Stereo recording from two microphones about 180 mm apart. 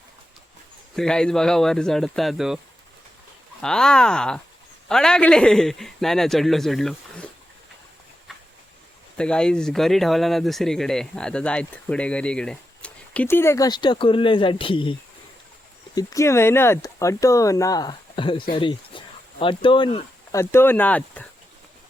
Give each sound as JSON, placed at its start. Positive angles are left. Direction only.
{"t": 0.9, "sound": "speech", "side_deg": 5}
{"t": 3.6, "sound": "speech", "side_deg": 5}
{"t": 8.3, "sound": "a sound", "side_deg": 0}
{"t": 9.1, "sound": "speech", "side_deg": 5}
{"t": 16.0, "sound": "speech", "side_deg": 20}
{"t": 20.3, "sound": "speech", "side_deg": 15}